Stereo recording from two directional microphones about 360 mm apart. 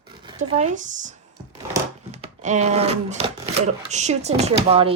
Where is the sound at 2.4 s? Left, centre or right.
Centre.